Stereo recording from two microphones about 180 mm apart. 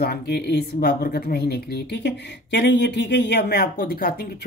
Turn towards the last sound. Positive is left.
turn(degrees=55)  # may be behind; listen again after turning